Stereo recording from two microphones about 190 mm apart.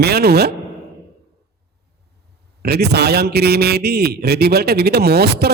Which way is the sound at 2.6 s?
55° right (ahead or behind).